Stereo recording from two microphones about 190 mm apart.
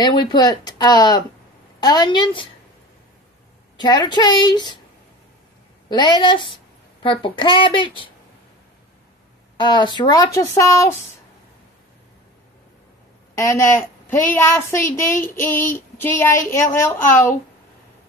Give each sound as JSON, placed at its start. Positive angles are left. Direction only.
{"t": 0.0, "sound": "speech", "side_deg": 20}
{"t": 3.7, "sound": "speech", "side_deg": 20}
{"t": 5.9, "sound": "speech", "side_deg": 25}
{"t": 9.6, "sound": "speech", "side_deg": 25}
{"t": 13.3, "sound": "speech", "side_deg": 15}